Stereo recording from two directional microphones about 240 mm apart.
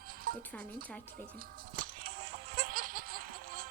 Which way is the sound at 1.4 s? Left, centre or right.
Right.